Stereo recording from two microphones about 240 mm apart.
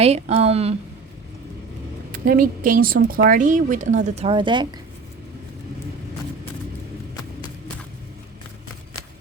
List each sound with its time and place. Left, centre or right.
0.0 s a woman's voice: right
2.1 s speech: right; by 4.7 s centre